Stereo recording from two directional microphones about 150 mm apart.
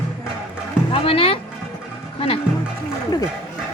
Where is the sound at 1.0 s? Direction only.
40° left (ahead or behind).